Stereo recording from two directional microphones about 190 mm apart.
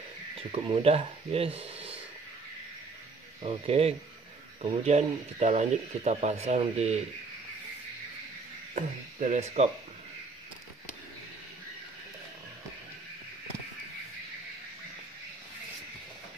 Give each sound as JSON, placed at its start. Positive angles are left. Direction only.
{"t": 0.5, "sound": "speech", "side_deg": -30}
{"t": 3.4, "sound": "speech", "side_deg": -30}
{"t": 8.7, "sound": "speech", "side_deg": -40}